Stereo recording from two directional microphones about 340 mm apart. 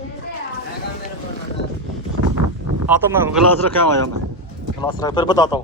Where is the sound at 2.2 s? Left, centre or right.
Right.